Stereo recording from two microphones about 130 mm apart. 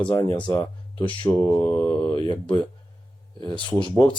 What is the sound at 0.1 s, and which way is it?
Speech, 25° left (ahead or behind).